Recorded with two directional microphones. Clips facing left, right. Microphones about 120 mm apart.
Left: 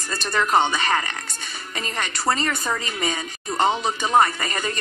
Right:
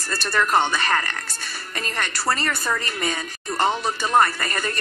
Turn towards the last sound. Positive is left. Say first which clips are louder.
# even
turn(degrees=20)  # may be behind; listen again after turning